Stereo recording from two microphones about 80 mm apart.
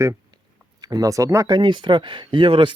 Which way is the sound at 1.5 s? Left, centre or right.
Right.